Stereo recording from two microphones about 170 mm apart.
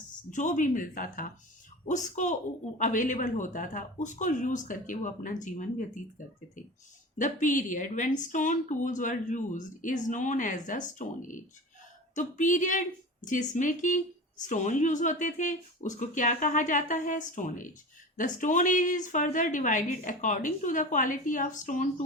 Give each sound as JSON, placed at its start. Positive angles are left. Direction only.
{"t": 0.3, "sound": "speech", "side_deg": 50}
{"t": 7.2, "sound": "speech", "side_deg": 45}